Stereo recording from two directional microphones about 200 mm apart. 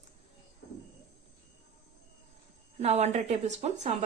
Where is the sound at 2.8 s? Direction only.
35° right (ahead or behind).